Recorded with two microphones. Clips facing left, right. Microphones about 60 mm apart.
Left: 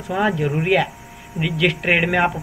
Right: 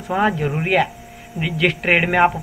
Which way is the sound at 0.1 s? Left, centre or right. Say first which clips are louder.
Right 1 dB; centre.